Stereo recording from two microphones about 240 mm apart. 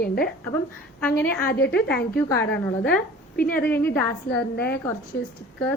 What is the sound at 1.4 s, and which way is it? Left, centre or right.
Speech, left.